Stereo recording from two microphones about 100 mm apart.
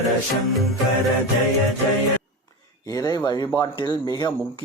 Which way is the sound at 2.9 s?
35° left (ahead or behind).